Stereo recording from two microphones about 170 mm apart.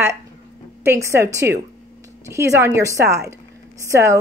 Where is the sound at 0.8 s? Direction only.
15° right (ahead or behind).